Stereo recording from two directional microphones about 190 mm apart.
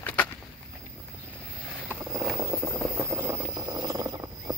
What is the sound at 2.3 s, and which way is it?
Vehicle, 15° right (ahead or behind).